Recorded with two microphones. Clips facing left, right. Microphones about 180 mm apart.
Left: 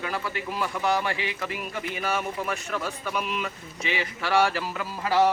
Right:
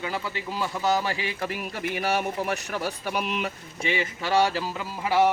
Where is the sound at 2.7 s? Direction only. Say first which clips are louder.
Right 1 dB; 35° right (ahead or behind).